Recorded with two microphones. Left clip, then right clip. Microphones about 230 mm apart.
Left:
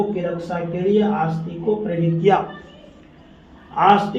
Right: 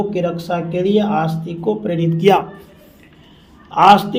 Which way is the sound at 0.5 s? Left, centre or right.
Right.